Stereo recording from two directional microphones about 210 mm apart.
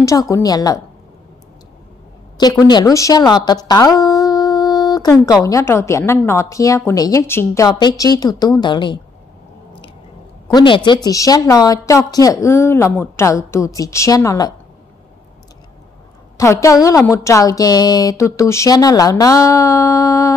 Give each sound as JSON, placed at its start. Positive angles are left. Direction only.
{"t": 0.0, "sound": "a woman's voice", "side_deg": 15}
{"t": 2.3, "sound": "a woman's voice", "side_deg": 20}
{"t": 3.6, "sound": "a sound", "side_deg": 20}
{"t": 5.2, "sound": "a woman's voice", "side_deg": 15}
{"t": 10.5, "sound": "a woman's voice", "side_deg": 20}
{"t": 16.3, "sound": "a woman's voice", "side_deg": 15}